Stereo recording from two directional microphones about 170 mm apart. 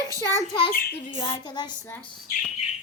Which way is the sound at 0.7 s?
60° left (ahead or behind).